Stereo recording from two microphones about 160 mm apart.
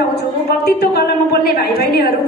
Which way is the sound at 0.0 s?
85° left.